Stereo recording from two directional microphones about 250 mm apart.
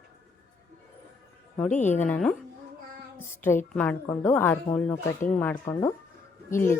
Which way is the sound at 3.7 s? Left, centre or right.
Centre.